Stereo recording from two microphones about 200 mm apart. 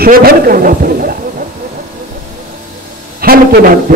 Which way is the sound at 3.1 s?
50° right (ahead or behind).